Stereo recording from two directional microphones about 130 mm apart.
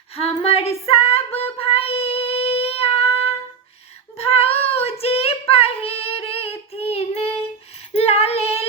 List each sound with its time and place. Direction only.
0.2 s child singing: 50° left (ahead or behind)
7.9 s female singing: 50° left (ahead or behind)